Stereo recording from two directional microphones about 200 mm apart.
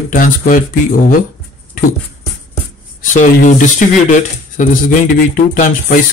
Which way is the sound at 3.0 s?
40° left (ahead or behind).